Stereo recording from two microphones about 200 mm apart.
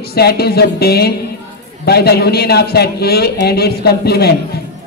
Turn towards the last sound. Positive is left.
turn(degrees=55)  # may be behind; listen again after turning